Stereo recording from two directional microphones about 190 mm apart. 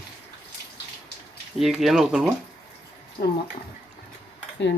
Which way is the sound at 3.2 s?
55° left (ahead or behind).